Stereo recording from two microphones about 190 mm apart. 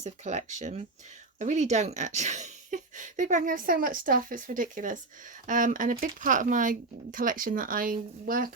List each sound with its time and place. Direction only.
0.0 s speech: 35° right (ahead or behind)